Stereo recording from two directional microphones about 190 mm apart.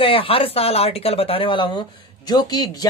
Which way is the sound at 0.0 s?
30° left (ahead or behind).